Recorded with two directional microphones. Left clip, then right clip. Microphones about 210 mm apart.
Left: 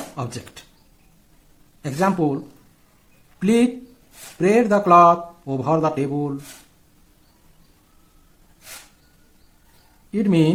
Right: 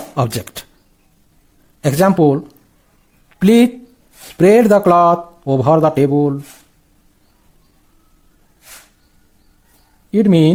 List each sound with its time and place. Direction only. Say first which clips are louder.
0.2 s speech: right 14 dB; 45° right (ahead or behind)
1.8 s speech: right 8 dB; 45° right (ahead or behind)
3.4 s speech: right 7 dB; 45° right (ahead or behind)
10.1 s speech: right 7 dB; 40° right (ahead or behind)